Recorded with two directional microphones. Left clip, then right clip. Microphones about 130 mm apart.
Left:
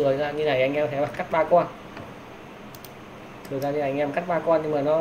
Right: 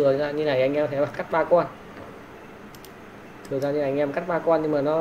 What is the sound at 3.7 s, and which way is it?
Speech, 20° right (ahead or behind).